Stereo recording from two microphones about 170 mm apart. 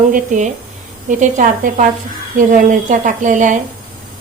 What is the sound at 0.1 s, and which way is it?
A woman's voice, 45° right (ahead or behind).